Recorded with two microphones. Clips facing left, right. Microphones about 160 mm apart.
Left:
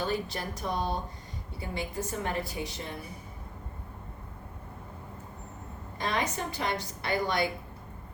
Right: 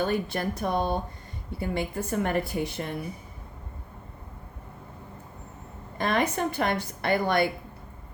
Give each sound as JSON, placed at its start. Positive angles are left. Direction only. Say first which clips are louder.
{"t": 0.0, "sound": "a woman's voice", "louder": "right 5 dB", "side_deg": -55}
{"t": 6.0, "sound": "a woman's voice", "louder": "right 6 dB", "side_deg": -55}